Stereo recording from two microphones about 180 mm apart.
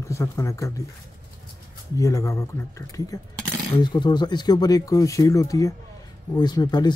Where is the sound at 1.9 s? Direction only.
15° left (ahead or behind).